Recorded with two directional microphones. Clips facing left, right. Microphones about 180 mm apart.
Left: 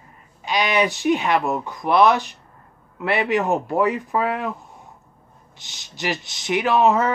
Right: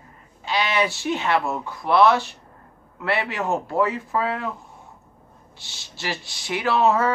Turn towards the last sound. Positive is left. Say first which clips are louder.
# left 2 dB
turn(degrees=20)  # may be behind; listen again after turning